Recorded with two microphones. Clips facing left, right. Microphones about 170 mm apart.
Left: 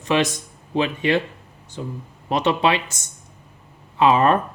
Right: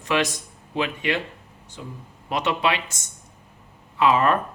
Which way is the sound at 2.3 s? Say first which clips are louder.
Left 4 dB; 30° left (ahead or behind).